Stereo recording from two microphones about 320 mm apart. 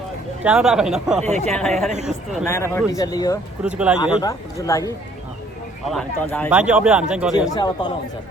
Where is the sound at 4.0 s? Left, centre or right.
Centre.